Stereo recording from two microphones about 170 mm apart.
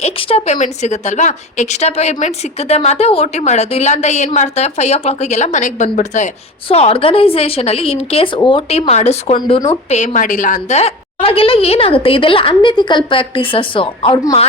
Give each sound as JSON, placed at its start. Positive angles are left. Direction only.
{"t": 0.0, "sound": "a woman's voice", "side_deg": 35}